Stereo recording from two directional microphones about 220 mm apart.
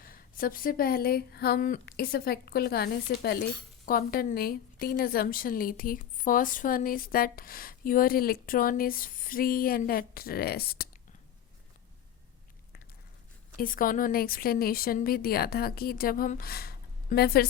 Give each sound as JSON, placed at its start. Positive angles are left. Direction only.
{"t": 0.0, "sound": "a woman's voice", "side_deg": 40}
{"t": 13.6, "sound": "speech", "side_deg": 40}